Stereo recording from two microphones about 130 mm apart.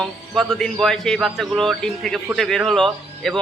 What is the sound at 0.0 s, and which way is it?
Speech, centre (ahead or behind).